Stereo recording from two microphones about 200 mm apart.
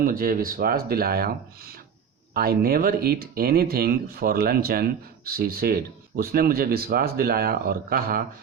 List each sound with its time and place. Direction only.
0.0 s speech: 45° right (ahead or behind)